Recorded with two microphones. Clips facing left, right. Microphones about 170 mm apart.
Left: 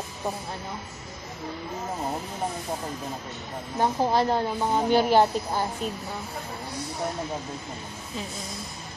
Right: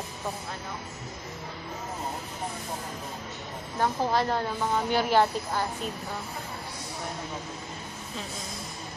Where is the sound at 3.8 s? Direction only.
25° left (ahead or behind).